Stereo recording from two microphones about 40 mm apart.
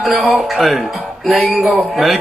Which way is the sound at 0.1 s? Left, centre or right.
Right.